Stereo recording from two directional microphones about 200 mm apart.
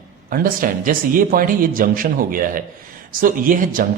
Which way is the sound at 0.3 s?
45° right (ahead or behind).